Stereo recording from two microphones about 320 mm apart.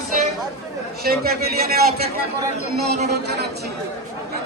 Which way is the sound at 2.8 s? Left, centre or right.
Right.